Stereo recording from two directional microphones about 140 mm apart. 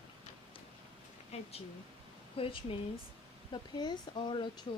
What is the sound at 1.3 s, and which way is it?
Speech, 50° left (ahead or behind).